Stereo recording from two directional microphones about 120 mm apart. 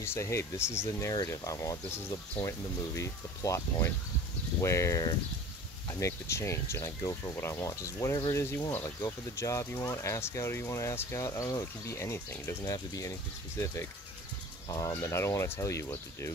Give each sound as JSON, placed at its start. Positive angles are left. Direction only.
{"t": 0.0, "sound": "speech", "side_deg": 20}
{"t": 15.0, "sound": "speech", "side_deg": 25}